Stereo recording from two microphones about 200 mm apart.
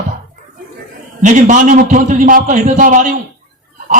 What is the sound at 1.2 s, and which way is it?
A man's voice, 40° right (ahead or behind).